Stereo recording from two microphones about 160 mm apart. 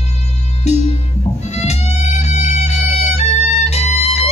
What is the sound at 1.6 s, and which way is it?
Music, 45° left (ahead or behind).